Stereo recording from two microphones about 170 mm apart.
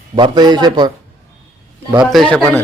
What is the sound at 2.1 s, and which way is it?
Speech, centre (ahead or behind).